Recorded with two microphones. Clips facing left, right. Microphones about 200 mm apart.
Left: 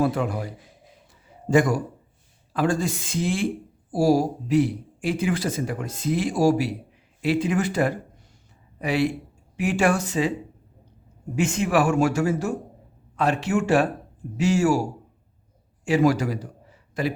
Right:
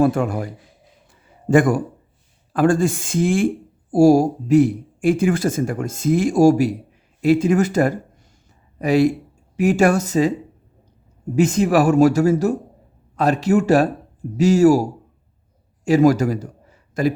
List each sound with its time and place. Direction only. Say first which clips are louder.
0.0 s speech: right 6 dB; 50° right (ahead or behind)
1.5 s speech: right 4 dB; 55° right (ahead or behind)
11.3 s a man's voice: right 6 dB; 40° right (ahead or behind)